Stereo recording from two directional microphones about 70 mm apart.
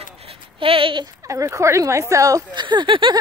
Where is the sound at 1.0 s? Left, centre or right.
Right.